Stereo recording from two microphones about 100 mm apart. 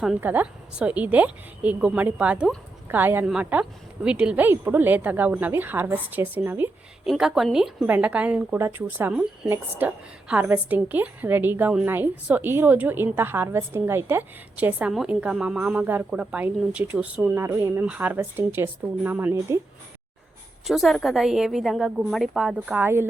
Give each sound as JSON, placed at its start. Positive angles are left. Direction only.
{"t": 0.2, "sound": "a woman's voice", "side_deg": -15}
{"t": 3.2, "sound": "a woman's voice", "side_deg": -10}
{"t": 4.4, "sound": "a woman's voice", "side_deg": -20}
{"t": 7.0, "sound": "a woman's voice", "side_deg": -5}
{"t": 7.9, "sound": "a woman's voice", "side_deg": -15}
{"t": 17.2, "sound": "a woman's voice", "side_deg": -25}
{"t": 17.8, "sound": "a woman's voice", "side_deg": -15}
{"t": 20.7, "sound": "a woman's voice", "side_deg": 0}
{"t": 22.8, "sound": "a woman's voice", "side_deg": -25}